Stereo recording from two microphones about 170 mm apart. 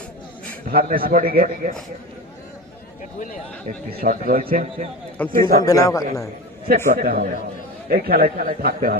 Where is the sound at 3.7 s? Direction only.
55° right (ahead or behind).